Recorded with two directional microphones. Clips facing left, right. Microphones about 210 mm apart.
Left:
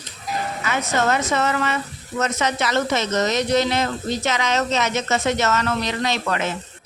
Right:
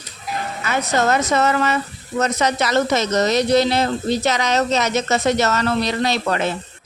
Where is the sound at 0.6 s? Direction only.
35° right (ahead or behind).